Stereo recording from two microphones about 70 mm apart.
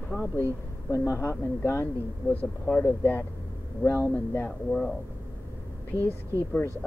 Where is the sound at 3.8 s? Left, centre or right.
Left.